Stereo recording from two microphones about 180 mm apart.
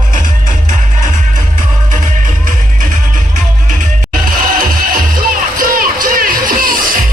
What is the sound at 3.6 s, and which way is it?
Music, 50° right (ahead or behind).